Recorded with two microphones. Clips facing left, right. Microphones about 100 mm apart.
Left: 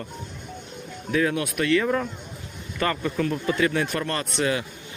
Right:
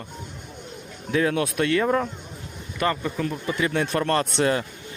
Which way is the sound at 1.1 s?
30° right (ahead or behind).